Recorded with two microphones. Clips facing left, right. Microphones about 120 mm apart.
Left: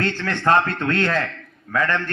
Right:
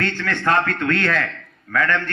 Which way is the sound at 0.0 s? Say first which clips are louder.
Left 1 dB; 20° left (ahead or behind).